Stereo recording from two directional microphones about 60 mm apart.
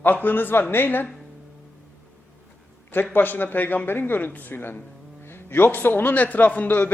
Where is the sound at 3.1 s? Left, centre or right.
Left.